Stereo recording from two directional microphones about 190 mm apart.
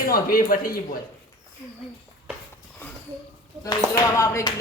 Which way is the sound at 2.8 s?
10° left (ahead or behind).